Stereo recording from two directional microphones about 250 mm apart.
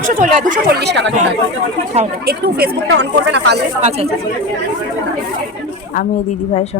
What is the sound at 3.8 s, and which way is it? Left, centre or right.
Speech, right.